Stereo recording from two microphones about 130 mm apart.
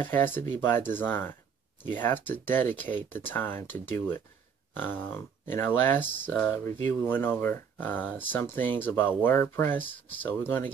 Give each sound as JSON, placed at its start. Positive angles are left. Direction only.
{"t": 0.0, "sound": "speech", "side_deg": 15}